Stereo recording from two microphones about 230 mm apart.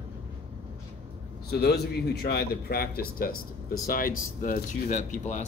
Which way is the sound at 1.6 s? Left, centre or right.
Left.